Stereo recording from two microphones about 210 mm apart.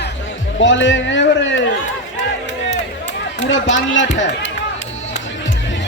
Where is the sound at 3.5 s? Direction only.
65° left (ahead or behind).